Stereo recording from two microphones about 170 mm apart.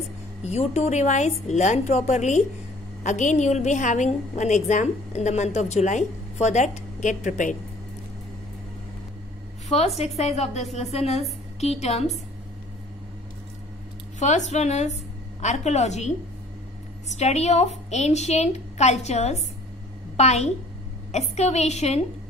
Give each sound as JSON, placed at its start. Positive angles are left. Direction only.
{"t": 0.5, "sound": "a woman's voice", "side_deg": 40}
{"t": 9.7, "sound": "a woman's voice", "side_deg": 40}
{"t": 14.2, "sound": "a woman's voice", "side_deg": 45}
{"t": 17.2, "sound": "a woman's voice", "side_deg": 40}